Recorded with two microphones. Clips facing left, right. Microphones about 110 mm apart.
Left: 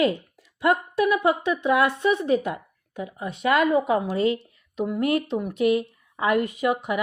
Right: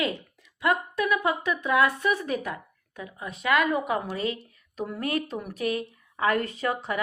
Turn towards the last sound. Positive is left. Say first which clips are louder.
# left 5 dB
turn(degrees=15)  # may be behind; listen again after turning